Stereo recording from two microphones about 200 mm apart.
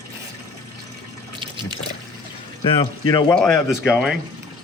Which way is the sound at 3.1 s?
20° left (ahead or behind).